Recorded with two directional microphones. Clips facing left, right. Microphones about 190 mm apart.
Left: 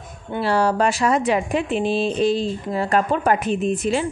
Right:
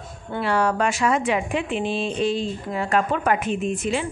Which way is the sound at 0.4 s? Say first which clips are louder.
Left 3 dB; 35° left (ahead or behind).